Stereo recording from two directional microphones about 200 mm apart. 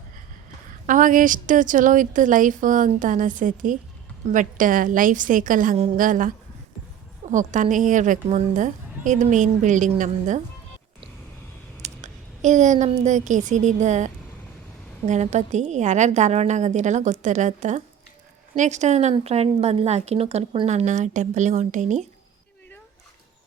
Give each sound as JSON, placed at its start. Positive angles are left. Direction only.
{"t": 0.9, "sound": "a woman's voice", "side_deg": -40}
{"t": 11.8, "sound": "a woman's voice", "side_deg": -35}